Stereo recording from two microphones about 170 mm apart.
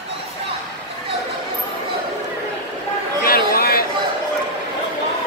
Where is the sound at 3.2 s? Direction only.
60° left (ahead or behind).